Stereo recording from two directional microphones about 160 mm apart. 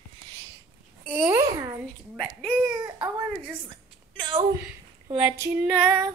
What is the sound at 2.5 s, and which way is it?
Female singing, 10° right (ahead or behind).